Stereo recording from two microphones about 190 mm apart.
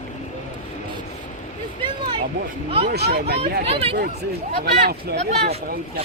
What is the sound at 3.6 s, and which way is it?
Speech, 30° right (ahead or behind).